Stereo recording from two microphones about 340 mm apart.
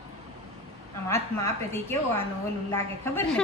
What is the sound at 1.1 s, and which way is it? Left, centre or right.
A woman's voice, centre.